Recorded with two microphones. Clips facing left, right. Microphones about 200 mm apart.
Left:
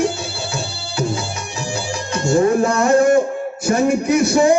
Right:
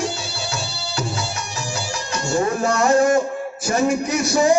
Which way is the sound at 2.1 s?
55° left (ahead or behind).